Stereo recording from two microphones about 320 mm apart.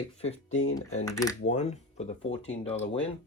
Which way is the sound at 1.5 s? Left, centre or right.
Left.